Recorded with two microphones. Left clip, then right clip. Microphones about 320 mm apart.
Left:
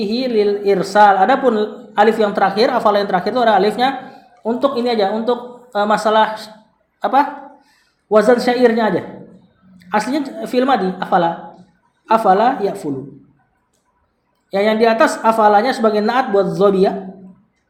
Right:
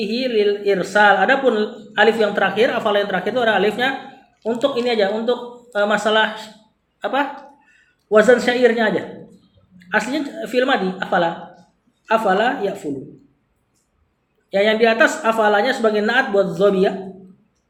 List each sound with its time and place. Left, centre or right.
0.0 s a woman's voice: left
14.5 s speech: left